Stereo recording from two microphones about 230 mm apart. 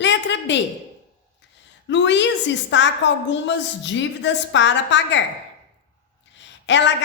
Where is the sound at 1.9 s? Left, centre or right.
Left.